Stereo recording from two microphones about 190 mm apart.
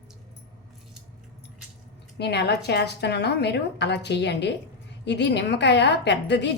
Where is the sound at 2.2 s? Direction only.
60° left (ahead or behind).